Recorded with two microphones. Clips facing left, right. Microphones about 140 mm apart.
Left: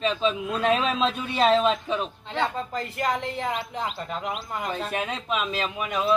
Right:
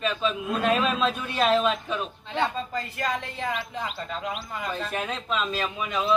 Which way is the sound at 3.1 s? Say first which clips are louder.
Left 2 dB; 20° left (ahead or behind).